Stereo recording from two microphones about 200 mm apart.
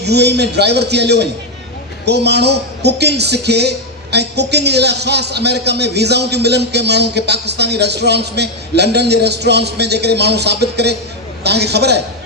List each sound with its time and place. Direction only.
0.0 s a man's voice: 55° right (ahead or behind)